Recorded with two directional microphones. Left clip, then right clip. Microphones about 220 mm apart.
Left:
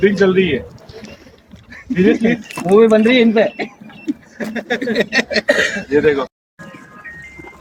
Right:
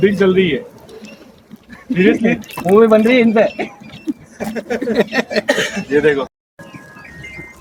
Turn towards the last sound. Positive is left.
turn(degrees=-20)  # may be behind; listen again after turning